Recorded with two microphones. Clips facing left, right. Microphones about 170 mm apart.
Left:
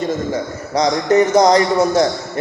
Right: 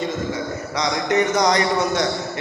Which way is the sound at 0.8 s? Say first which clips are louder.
Left 7 dB; 35° left (ahead or behind).